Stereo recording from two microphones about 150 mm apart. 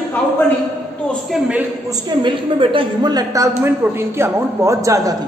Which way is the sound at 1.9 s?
30° right (ahead or behind).